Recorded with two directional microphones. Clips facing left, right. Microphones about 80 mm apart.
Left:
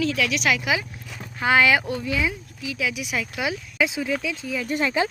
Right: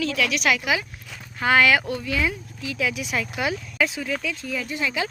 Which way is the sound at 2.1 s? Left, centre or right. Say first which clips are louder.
Even; centre.